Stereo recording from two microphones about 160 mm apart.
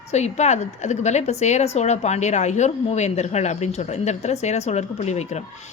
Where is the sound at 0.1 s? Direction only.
45° left (ahead or behind).